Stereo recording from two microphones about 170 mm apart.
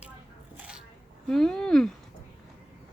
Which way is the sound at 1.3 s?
5° left (ahead or behind).